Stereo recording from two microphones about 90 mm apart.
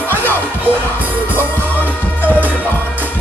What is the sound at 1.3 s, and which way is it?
Music, 20° left (ahead or behind).